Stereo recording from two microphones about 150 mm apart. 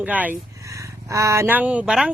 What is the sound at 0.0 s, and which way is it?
Speech, 10° right (ahead or behind).